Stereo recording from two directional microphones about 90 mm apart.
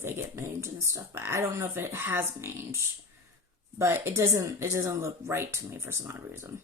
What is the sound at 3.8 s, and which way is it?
Speech, 30° right (ahead or behind).